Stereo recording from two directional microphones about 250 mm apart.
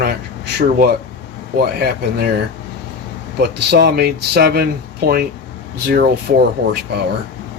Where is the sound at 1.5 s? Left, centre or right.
Right.